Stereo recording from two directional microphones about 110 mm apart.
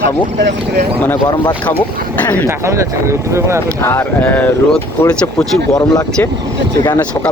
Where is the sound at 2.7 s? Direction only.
25° right (ahead or behind).